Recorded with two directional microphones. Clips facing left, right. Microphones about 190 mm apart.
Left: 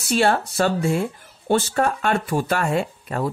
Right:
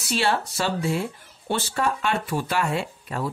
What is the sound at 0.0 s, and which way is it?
Speech, 50° left (ahead or behind).